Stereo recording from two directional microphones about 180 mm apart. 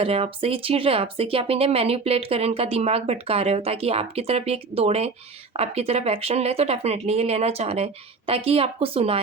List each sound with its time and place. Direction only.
0.0 s speech: 30° right (ahead or behind)